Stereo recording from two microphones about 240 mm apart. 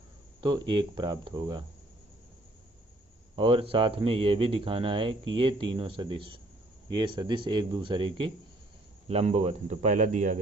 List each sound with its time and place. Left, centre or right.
0.4 s speech: centre
3.3 s speech: right